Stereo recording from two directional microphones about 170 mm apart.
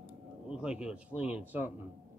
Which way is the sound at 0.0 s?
5° right (ahead or behind).